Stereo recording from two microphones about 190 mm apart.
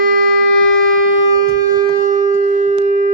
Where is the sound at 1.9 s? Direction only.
40° right (ahead or behind).